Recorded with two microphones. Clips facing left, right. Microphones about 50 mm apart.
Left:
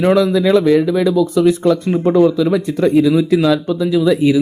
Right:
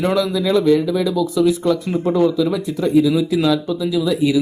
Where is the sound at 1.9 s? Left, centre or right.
Left.